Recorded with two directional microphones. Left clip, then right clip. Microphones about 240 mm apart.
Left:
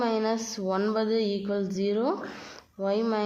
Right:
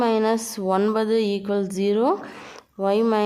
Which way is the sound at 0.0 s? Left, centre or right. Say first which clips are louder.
Right 6 dB; right.